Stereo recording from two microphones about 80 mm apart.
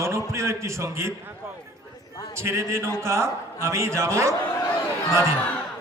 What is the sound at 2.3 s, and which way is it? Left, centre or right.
A man's voice, right.